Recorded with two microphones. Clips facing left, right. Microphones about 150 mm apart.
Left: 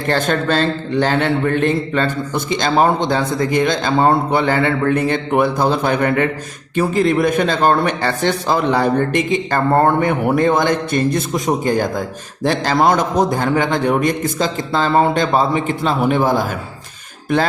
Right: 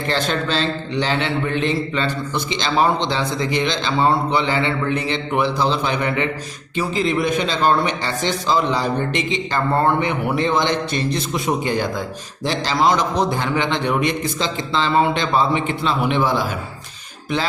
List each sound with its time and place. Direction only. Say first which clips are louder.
0.1 s a man's voice: left 5 dB; 50° left (ahead or behind)